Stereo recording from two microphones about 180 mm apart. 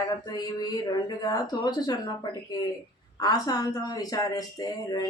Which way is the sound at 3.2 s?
20° left (ahead or behind).